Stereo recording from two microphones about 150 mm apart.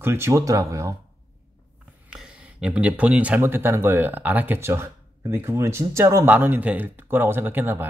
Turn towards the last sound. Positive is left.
turn(degrees=-15)  # may be behind; listen again after turning